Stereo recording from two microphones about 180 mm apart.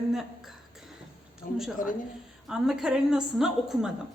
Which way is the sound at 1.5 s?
50° left (ahead or behind).